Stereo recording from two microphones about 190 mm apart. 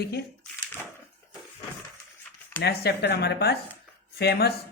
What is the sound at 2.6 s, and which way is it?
Speech, 60° left (ahead or behind).